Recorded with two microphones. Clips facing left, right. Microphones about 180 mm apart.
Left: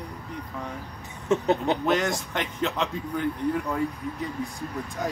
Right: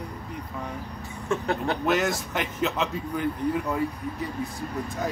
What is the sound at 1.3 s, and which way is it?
Speech, 20° left (ahead or behind).